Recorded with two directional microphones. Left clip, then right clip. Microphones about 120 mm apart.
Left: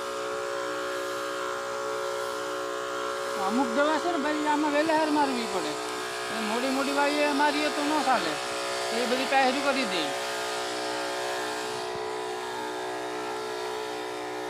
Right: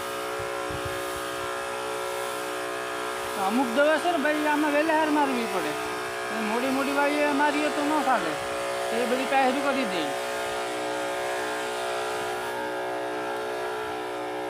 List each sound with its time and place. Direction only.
3.8 s speech: 35° right (ahead or behind)
4.4 s speech: 15° right (ahead or behind)
6.5 s speech: 10° right (ahead or behind)